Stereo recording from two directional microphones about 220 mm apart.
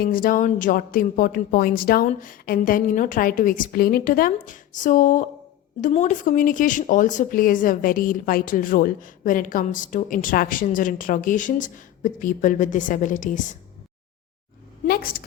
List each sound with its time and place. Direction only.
0.0 s speech: 40° left (ahead or behind)
14.8 s a woman's voice: 45° left (ahead or behind)